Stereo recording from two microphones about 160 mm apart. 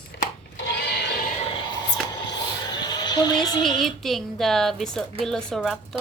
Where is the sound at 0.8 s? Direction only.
85° left.